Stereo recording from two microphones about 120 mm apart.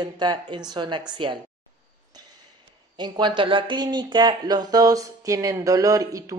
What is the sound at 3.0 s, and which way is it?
Speech, 40° right (ahead or behind).